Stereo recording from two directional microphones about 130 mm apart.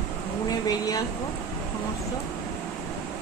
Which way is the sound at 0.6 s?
30° left (ahead or behind).